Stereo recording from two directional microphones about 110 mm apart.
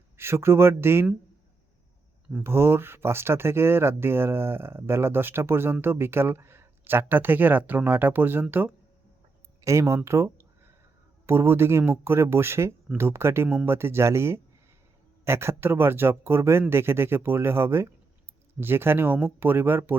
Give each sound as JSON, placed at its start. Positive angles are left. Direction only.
{"t": 0.2, "sound": "speech", "side_deg": -20}
{"t": 2.4, "sound": "speech", "side_deg": -20}
{"t": 9.6, "sound": "speech", "side_deg": -30}